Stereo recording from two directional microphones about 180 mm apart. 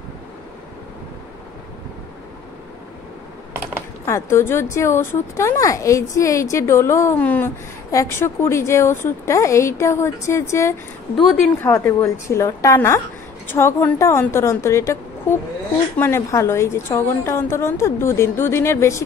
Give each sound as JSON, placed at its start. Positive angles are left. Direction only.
{"t": 4.0, "sound": "speech", "side_deg": 15}